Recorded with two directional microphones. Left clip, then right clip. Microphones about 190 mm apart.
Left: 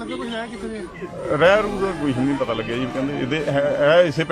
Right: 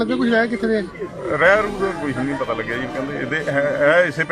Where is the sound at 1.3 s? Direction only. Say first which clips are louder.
Right 1 dB; centre (ahead or behind).